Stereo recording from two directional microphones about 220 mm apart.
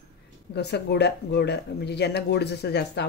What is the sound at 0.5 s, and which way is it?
Speech, 50° left (ahead or behind).